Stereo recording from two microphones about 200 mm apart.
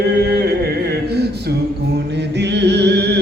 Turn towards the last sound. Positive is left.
turn(degrees=-55)  # may be behind; listen again after turning